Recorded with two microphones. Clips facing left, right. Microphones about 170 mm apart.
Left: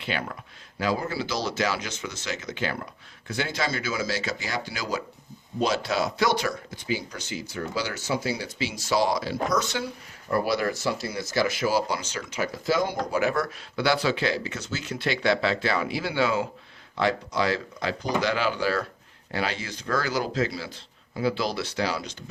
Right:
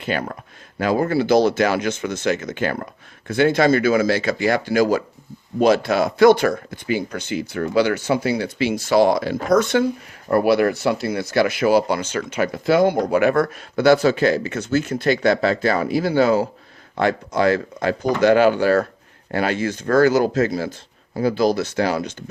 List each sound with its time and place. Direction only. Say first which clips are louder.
0.0 s speech: right 7 dB; 45° right (ahead or behind)
0.8 s speech: right 8 dB; 55° right (ahead or behind)
17.0 s speech: right 6 dB; 50° right (ahead or behind)